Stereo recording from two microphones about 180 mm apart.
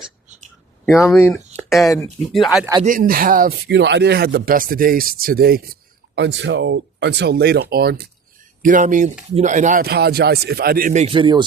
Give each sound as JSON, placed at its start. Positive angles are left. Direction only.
{"t": 0.9, "sound": "speech", "side_deg": 15}
{"t": 1.5, "sound": "a sound", "side_deg": 0}
{"t": 2.3, "sound": "speech", "side_deg": 0}
{"t": 2.8, "sound": "speech", "side_deg": -50}
{"t": 3.7, "sound": "speech", "side_deg": -75}
{"t": 6.1, "sound": "speech", "side_deg": -75}
{"t": 8.6, "sound": "speech", "side_deg": -45}
{"t": 11.0, "sound": "speech", "side_deg": -30}